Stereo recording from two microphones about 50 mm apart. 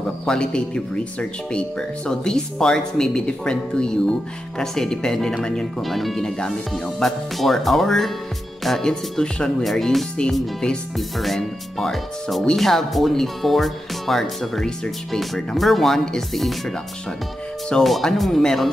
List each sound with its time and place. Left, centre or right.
0.3 s speech: centre
5.8 s speech: centre
17.8 s speech: centre